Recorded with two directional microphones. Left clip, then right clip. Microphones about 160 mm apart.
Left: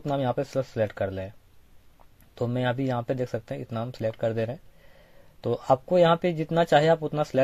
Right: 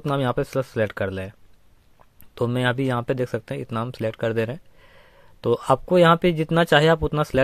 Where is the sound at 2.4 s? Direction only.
45° right (ahead or behind).